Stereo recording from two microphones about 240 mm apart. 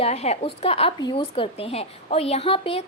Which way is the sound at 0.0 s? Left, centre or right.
Left.